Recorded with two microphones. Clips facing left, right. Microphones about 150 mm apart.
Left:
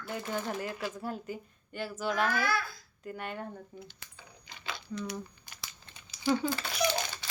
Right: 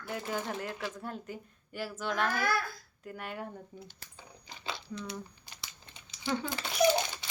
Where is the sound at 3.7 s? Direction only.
35° right (ahead or behind).